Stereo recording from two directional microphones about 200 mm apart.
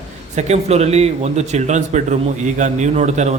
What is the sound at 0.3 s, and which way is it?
Speech, 35° right (ahead or behind).